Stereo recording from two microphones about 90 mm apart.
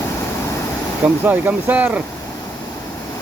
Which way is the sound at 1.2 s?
20° right (ahead or behind).